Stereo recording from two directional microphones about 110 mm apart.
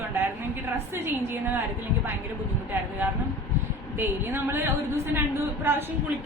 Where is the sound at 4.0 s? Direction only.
20° right (ahead or behind).